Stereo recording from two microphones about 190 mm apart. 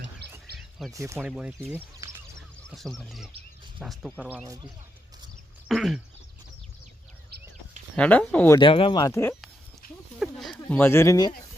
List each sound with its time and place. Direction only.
0.2 s a sound: 60° right (ahead or behind)
0.9 s speech: 15° right (ahead or behind)
2.6 s music: 5° left (ahead or behind)
3.8 s speech: centre (ahead or behind)
4.4 s speech: 20° right (ahead or behind)
5.6 s speech: centre (ahead or behind)
7.9 s speech: 5° left (ahead or behind)
8.5 s speech: 25° left (ahead or behind)
10.2 s a sound: centre (ahead or behind); by 11.3 s 20° left (ahead or behind)